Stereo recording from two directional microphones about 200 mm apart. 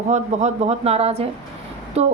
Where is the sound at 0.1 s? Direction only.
35° right (ahead or behind).